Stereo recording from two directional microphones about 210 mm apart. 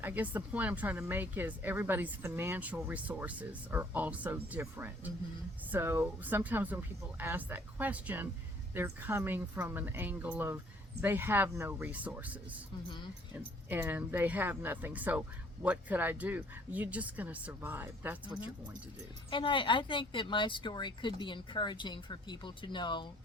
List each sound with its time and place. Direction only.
0.0 s speech: 10° right (ahead or behind)
19.3 s speech: 25° left (ahead or behind)